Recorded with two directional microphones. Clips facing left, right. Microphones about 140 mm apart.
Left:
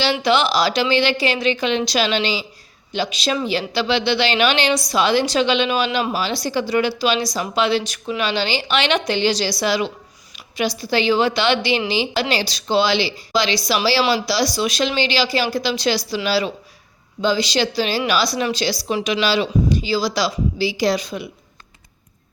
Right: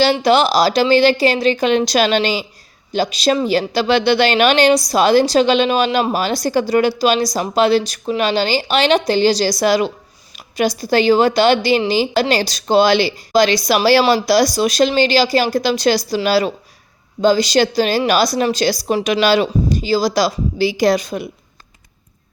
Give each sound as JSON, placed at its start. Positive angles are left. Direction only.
{"t": 0.0, "sound": "a woman's voice", "side_deg": -40}